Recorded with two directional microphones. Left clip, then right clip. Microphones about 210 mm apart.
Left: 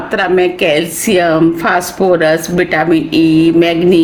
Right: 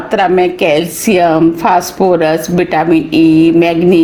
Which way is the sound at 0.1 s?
20° right (ahead or behind).